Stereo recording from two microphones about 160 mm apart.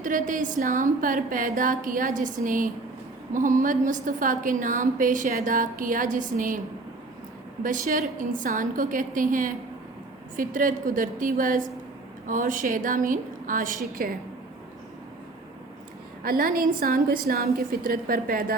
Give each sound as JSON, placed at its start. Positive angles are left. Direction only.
{"t": 0.0, "sound": "a woman's voice", "side_deg": -55}
{"t": 7.6, "sound": "a woman's voice", "side_deg": -55}
{"t": 16.2, "sound": "a woman's voice", "side_deg": -65}